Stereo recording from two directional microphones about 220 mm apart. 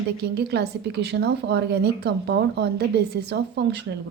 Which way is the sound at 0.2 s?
50° right (ahead or behind).